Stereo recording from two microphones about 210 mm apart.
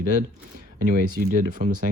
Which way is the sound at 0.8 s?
40° right (ahead or behind).